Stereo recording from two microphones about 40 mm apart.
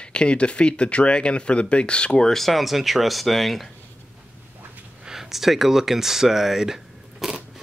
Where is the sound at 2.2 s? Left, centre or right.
Centre.